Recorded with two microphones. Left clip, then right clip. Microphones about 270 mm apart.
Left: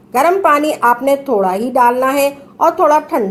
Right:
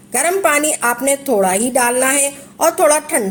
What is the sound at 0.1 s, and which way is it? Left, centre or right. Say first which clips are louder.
A woman's voice: left 4 dB; right.